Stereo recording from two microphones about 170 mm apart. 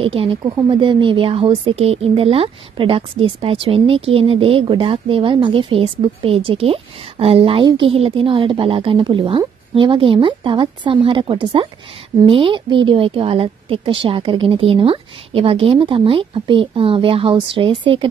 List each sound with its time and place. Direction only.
0.0 s a woman's voice: 35° right (ahead or behind)